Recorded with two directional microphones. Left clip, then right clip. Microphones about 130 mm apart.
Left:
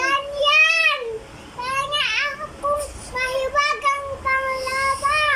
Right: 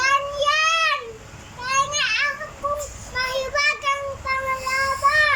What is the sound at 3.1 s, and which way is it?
Child singing, 20° left (ahead or behind).